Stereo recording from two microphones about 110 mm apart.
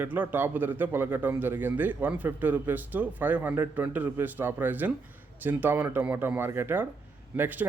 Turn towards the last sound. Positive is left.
turn(degrees=-15)  # may be behind; listen again after turning